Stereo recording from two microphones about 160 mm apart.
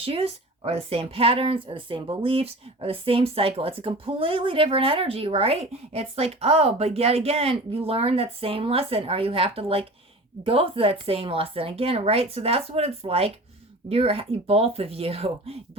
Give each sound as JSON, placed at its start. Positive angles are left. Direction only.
{"t": 0.0, "sound": "speech", "side_deg": -35}